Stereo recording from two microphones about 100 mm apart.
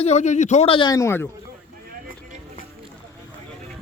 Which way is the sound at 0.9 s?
35° left (ahead or behind).